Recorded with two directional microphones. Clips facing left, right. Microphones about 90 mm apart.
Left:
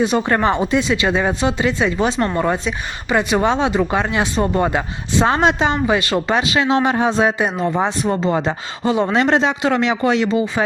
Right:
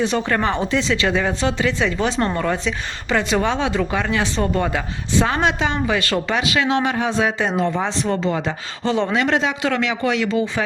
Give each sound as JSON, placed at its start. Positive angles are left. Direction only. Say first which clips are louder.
{"t": 0.0, "sound": "speech", "louder": "left 3 dB", "side_deg": 15}
{"t": 7.7, "sound": "speech", "louder": "left 3 dB", "side_deg": 15}
{"t": 9.1, "sound": "speech", "louder": "left 3 dB", "side_deg": 30}